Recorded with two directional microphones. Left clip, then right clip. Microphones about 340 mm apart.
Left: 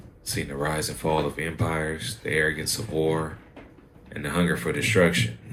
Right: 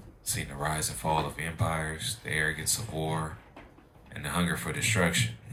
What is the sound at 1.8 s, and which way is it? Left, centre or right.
Speech, centre.